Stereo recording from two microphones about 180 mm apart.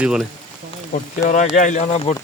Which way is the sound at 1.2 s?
45° left (ahead or behind).